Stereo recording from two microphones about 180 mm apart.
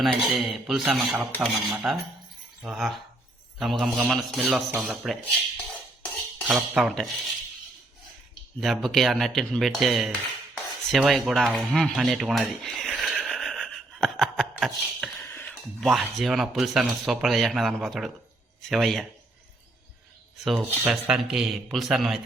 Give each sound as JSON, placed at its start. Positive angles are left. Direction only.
{"t": 0.0, "sound": "speech", "side_deg": 0}
{"t": 6.4, "sound": "speech", "side_deg": 0}
{"t": 8.6, "sound": "speech", "side_deg": 0}
{"t": 20.4, "sound": "speech", "side_deg": 0}